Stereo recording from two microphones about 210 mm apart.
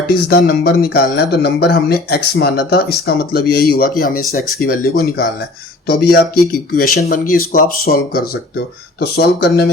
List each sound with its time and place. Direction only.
0.1 s speech: 45° left (ahead or behind)